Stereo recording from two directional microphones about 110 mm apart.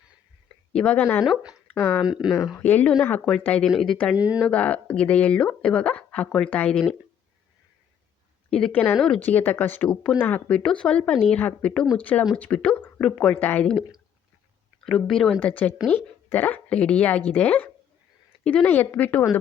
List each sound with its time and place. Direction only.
0.7 s speech: 10° left (ahead or behind)
1.2 s speech: 5° right (ahead or behind)
1.7 s speech: 20° left (ahead or behind)
2.0 s speech: 5° right (ahead or behind)
2.6 s speech: 15° left (ahead or behind)
4.2 s speech: 10° right (ahead or behind)
4.4 s speech: 10° left (ahead or behind)
8.5 s speech: 10° left (ahead or behind)
14.8 s speech: 5° left (ahead or behind)
15.4 s speech: 15° left (ahead or behind)